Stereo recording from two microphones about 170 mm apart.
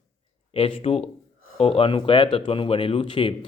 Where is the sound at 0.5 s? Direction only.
30° left (ahead or behind).